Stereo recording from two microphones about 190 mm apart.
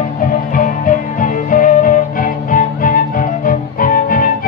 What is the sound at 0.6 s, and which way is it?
Music, 45° left (ahead or behind).